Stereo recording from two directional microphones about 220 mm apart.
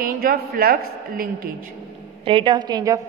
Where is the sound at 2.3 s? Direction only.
20° right (ahead or behind).